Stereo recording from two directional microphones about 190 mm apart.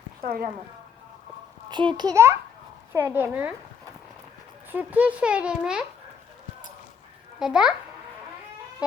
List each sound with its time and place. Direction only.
0.2 s speech: 50° right (ahead or behind)
1.7 s a child's voice: 25° right (ahead or behind)
4.7 s a child's voice: 10° right (ahead or behind)
7.3 s a child's voice: 5° right (ahead or behind)